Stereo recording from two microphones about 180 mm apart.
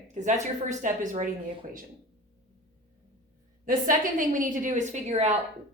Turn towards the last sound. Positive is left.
turn(degrees=-40)  # may be behind; listen again after turning